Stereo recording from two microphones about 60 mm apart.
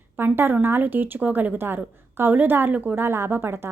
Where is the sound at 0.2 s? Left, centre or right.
Right.